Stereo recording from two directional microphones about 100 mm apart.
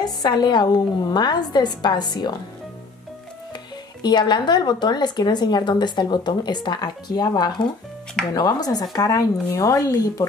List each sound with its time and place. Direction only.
0.0 s speech: 45° left (ahead or behind)
4.0 s speech: 45° left (ahead or behind)